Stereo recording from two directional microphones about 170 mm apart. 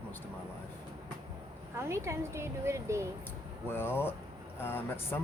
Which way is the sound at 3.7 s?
15° left (ahead or behind).